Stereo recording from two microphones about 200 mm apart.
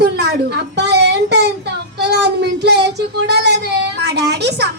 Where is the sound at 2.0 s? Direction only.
55° right (ahead or behind).